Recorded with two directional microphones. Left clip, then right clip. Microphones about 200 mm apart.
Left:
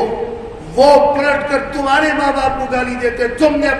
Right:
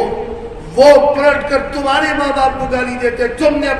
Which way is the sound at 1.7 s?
Centre (ahead or behind).